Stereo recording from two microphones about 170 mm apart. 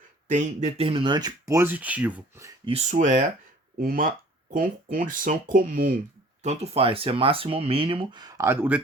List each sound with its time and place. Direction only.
0.3 s speech: 45° right (ahead or behind); by 2.5 s 10° right (ahead or behind)
2.6 s speech: 40° right (ahead or behind)
6.4 s speech: 40° right (ahead or behind); by 8.8 s 10° right (ahead or behind)